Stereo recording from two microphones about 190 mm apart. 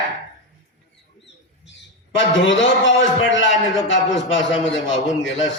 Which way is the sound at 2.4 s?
80° left.